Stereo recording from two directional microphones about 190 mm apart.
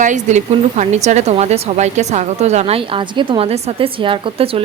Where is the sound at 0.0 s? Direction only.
40° right (ahead or behind).